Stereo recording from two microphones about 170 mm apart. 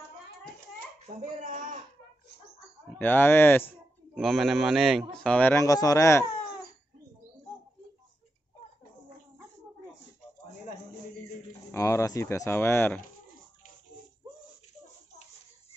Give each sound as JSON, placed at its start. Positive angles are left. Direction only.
{"t": 1.4, "sound": "speech", "side_deg": -45}
{"t": 3.0, "sound": "speech", "side_deg": 10}
{"t": 4.1, "sound": "a man's voice", "side_deg": 0}
{"t": 11.7, "sound": "speech", "side_deg": 15}